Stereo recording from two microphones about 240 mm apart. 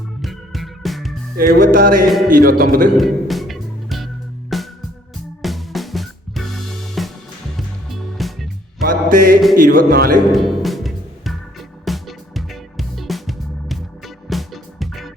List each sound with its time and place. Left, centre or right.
0.2 s organ: centre
1.4 s speech: right
3.0 s music: centre
8.2 s music: centre
8.8 s music: right
9.6 s speech: right
10.3 s music: centre